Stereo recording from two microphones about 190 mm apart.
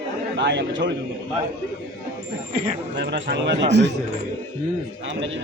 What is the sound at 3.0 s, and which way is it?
Speech, 65° right (ahead or behind).